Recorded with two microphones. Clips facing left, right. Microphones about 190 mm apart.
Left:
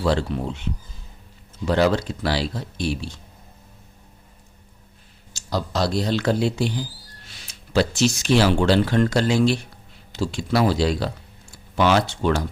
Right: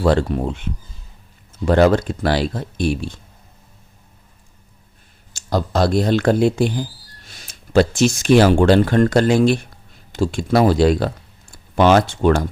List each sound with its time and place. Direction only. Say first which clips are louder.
0.0 s speech: right 5 dB; 50° right (ahead or behind)
5.3 s speech: right 5 dB; 50° right (ahead or behind)